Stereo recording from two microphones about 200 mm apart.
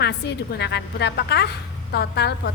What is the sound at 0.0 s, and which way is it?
A woman's voice, 55° left (ahead or behind).